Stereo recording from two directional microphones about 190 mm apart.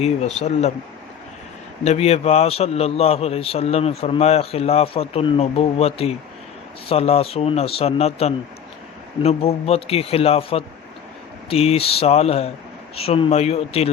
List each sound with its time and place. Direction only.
0.0 s a man's voice: 35° left (ahead or behind)
1.8 s a man's voice: 35° left (ahead or behind)